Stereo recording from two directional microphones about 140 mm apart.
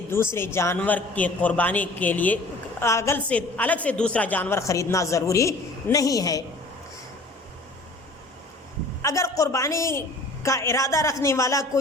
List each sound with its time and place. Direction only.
0.1 s a man's voice: 15° left (ahead or behind)
9.0 s a woman's voice: 20° left (ahead or behind)